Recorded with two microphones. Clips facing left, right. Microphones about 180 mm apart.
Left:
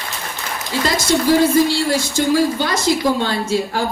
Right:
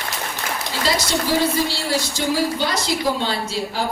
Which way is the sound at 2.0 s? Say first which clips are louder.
Left 4 dB; 50° left (ahead or behind).